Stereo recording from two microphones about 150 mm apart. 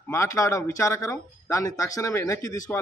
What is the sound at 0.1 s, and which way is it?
A man's voice, 20° left (ahead or behind).